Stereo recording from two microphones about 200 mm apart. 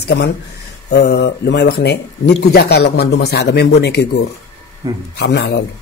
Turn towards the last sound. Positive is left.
turn(degrees=60)  # may be behind; listen again after turning